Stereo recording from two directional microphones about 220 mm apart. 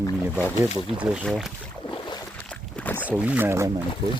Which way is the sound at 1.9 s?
20° left (ahead or behind).